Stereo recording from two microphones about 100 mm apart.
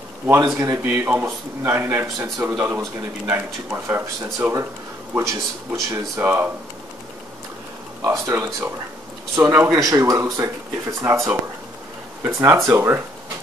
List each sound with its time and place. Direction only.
0.3 s speech: 30° right (ahead or behind)
2.1 s speech: 35° right (ahead or behind)
2.4 s speech: 15° right (ahead or behind)
8.0 s speech: 30° right (ahead or behind)